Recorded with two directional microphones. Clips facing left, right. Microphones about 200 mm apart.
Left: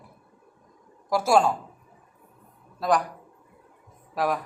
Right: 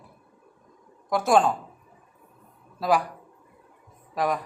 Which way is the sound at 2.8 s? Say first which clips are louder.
Even; centre (ahead or behind).